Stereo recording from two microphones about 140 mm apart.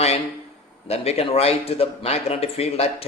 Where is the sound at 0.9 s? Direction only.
45° left (ahead or behind).